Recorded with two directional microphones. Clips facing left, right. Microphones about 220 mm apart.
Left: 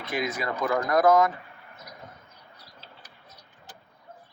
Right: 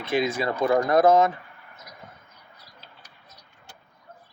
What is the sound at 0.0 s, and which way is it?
Speech, 25° right (ahead or behind).